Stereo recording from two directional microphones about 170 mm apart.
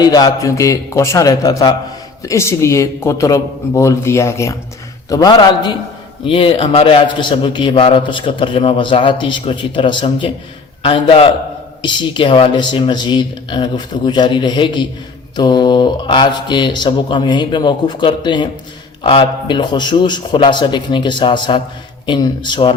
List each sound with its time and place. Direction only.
0.0 s a man's voice: 20° left (ahead or behind)